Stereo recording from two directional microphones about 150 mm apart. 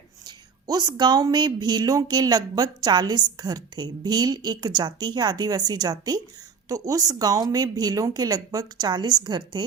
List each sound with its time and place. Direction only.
0.3 s speech: 25° right (ahead or behind)